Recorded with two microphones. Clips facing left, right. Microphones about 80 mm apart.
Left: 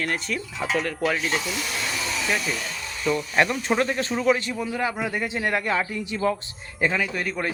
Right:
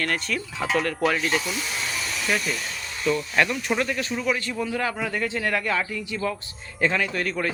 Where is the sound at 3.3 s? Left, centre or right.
Left.